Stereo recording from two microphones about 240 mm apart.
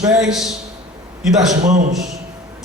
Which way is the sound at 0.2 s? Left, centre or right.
Centre.